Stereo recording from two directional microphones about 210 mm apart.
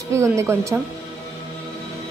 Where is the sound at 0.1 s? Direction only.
15° right (ahead or behind).